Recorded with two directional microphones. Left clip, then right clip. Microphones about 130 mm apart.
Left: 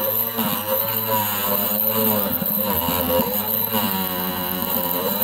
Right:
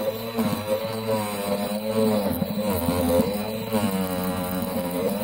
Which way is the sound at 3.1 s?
30° left (ahead or behind).